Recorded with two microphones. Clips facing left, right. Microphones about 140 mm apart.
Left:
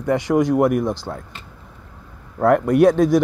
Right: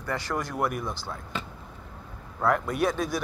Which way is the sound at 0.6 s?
90° left.